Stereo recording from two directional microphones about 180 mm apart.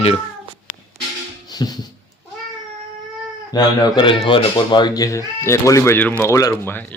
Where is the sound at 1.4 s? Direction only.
20° left (ahead or behind).